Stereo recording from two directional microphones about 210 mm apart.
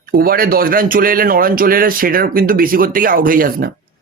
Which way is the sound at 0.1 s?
45° right (ahead or behind).